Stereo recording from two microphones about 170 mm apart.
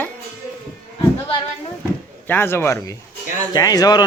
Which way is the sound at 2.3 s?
15° left (ahead or behind).